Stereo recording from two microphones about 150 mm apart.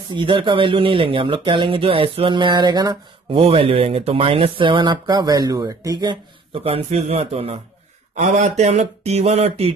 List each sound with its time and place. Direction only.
0.1 s speech: 35° right (ahead or behind)
3.3 s speech: 40° right (ahead or behind)